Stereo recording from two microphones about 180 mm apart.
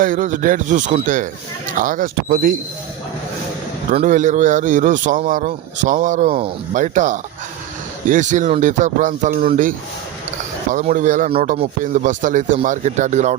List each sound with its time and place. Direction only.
0.0 s a man's voice: 45° right (ahead or behind)
4.0 s a man's voice: 45° right (ahead or behind)
10.7 s a man's voice: 45° right (ahead or behind)